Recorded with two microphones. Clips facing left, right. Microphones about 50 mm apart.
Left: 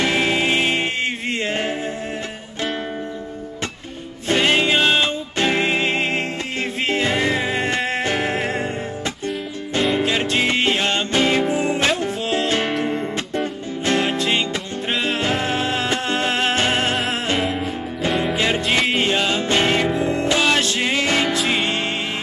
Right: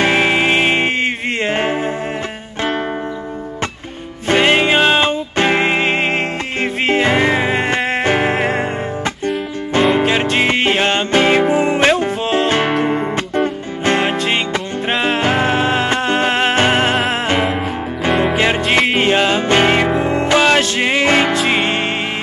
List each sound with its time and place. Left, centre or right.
0.0 s music: right
4.3 s music: right